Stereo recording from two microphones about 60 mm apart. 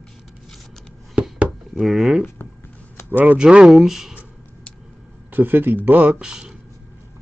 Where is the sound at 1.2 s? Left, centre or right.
Right.